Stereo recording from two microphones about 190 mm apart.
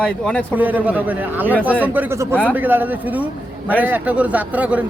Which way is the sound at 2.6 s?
10° right (ahead or behind).